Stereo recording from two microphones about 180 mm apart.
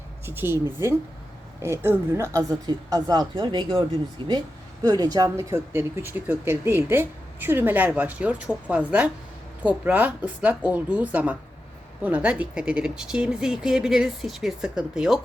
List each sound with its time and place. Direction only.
0.3 s speech: 10° right (ahead or behind)
0.5 s a woman's voice: 20° left (ahead or behind)
1.7 s a woman's voice: 15° right (ahead or behind)